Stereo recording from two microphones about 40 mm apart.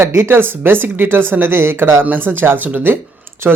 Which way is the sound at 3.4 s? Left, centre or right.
Right.